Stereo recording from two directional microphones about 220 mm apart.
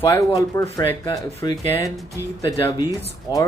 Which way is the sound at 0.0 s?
15° left (ahead or behind).